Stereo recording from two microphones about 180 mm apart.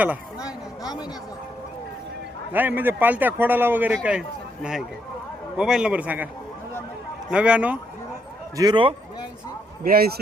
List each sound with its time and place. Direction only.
0.4 s a woman's voice: 20° left (ahead or behind)
2.5 s a man's voice: 10° right (ahead or behind)
7.3 s a man's voice: 5° right (ahead or behind)
8.5 s a man's voice: 25° right (ahead or behind)
9.8 s a man's voice: 55° right (ahead or behind)